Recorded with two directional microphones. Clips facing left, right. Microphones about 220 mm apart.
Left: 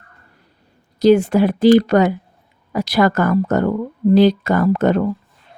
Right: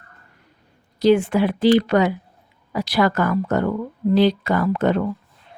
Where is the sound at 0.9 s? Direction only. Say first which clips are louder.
Left 4 dB; 40° left (ahead or behind).